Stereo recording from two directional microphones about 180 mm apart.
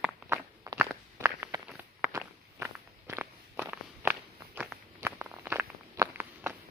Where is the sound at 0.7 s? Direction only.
15° right (ahead or behind).